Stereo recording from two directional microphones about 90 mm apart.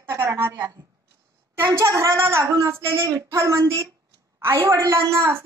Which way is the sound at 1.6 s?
35° right (ahead or behind).